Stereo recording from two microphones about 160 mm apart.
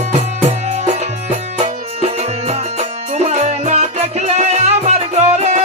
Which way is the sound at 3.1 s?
45° right (ahead or behind).